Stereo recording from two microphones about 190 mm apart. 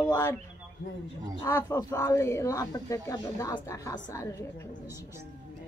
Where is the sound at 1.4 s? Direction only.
20° left (ahead or behind).